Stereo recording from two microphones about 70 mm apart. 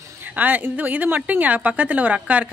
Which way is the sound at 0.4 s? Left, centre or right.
Right.